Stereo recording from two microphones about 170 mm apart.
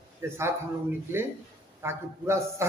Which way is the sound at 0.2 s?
15° right (ahead or behind).